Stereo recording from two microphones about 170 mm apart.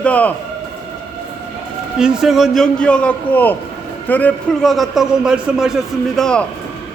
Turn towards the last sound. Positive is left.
turn(degrees=5)  # may be behind; listen again after turning